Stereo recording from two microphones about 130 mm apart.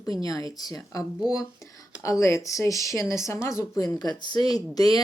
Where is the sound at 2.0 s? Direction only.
25° left (ahead or behind).